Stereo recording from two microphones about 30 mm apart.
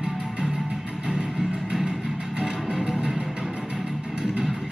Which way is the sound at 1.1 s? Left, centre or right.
Centre.